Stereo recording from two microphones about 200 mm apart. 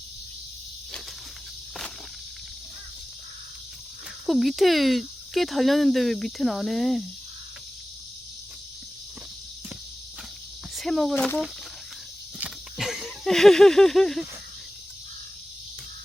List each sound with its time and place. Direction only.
4.3 s speech: centre (ahead or behind)
10.8 s speech: centre (ahead or behind)
12.4 s a sound: centre (ahead or behind)